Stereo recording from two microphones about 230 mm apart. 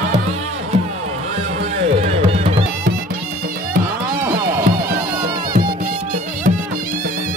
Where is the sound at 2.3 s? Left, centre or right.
Right.